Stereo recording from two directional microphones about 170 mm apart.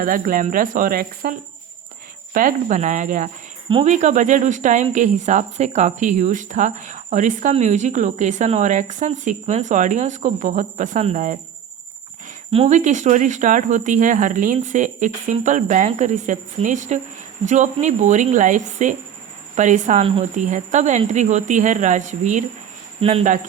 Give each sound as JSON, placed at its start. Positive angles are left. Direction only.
{"t": 0.0, "sound": "speech", "side_deg": -55}
{"t": 2.3, "sound": "speech", "side_deg": -50}
{"t": 12.5, "sound": "speech", "side_deg": -40}
{"t": 23.0, "sound": "speech", "side_deg": -35}